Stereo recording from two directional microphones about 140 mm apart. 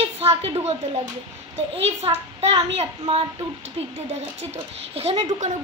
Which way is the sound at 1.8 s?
45° right (ahead or behind).